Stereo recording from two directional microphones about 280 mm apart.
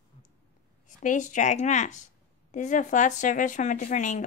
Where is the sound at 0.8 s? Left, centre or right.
Left.